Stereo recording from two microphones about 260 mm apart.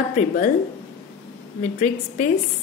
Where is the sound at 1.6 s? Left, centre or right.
Left.